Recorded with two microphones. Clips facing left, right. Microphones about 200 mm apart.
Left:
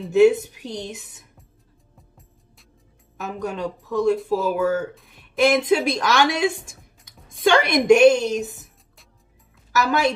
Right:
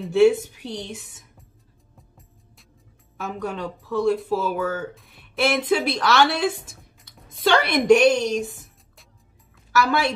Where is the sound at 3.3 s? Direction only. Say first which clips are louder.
Left 3 dB; 40° left (ahead or behind).